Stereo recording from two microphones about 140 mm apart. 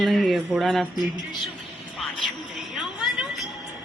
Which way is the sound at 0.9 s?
30° left (ahead or behind).